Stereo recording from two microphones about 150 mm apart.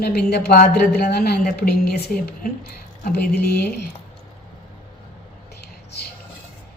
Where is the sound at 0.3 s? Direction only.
90° left.